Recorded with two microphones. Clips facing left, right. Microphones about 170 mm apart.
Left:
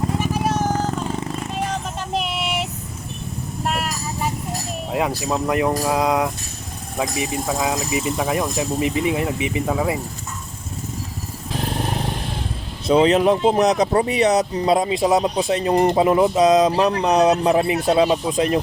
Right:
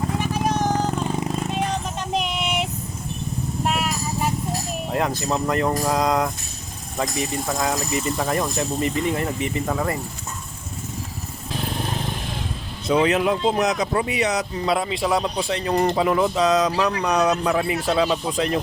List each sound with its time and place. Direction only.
0.2 s vehicle: 5° left (ahead or behind)
2.1 s child singing: centre (ahead or behind)
3.6 s vehicle: centre (ahead or behind)
4.9 s speech: 5° left (ahead or behind)
12.9 s speech: 30° left (ahead or behind)